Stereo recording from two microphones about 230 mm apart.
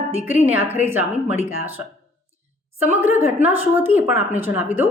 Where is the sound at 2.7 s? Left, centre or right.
Centre.